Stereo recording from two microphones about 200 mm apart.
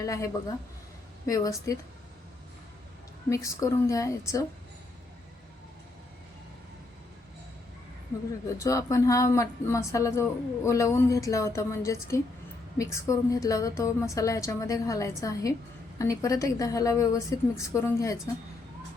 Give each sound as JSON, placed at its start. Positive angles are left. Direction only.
{"t": 0.0, "sound": "speech", "side_deg": 15}
{"t": 1.3, "sound": "speech", "side_deg": 15}
{"t": 3.2, "sound": "speech", "side_deg": 15}
{"t": 8.3, "sound": "speech", "side_deg": 15}